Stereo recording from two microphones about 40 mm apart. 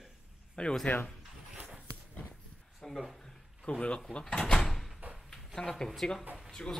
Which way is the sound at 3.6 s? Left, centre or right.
Left.